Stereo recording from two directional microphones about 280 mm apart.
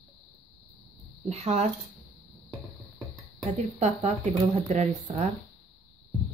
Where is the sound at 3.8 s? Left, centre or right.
Right.